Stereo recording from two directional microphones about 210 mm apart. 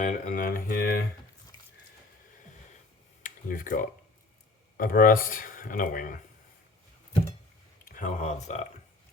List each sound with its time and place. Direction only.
0.0 s speech: 40° left (ahead or behind)
3.2 s speech: 40° left (ahead or behind)
7.9 s speech: 35° left (ahead or behind)